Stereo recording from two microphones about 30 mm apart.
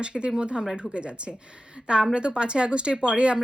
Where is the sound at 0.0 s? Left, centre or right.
Right.